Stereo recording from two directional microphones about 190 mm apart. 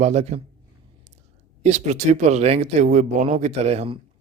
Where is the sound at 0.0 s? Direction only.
35° right (ahead or behind).